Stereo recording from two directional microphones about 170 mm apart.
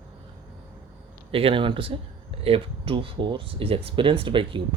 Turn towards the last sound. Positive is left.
turn(degrees=-30)  # may be behind; listen again after turning